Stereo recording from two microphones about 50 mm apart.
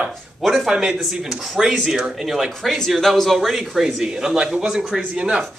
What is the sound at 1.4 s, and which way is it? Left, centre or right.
Speech, centre.